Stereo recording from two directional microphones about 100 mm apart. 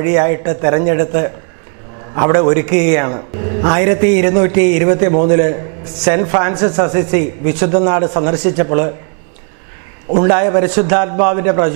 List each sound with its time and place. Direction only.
0.0 s a man's voice: 15° right (ahead or behind)
10.1 s a man's voice: 15° right (ahead or behind)